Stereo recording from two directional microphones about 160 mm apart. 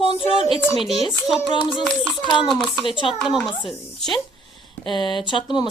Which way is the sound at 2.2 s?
30° left (ahead or behind).